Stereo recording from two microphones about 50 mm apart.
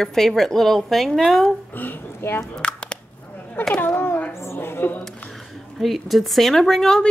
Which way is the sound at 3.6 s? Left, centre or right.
Left.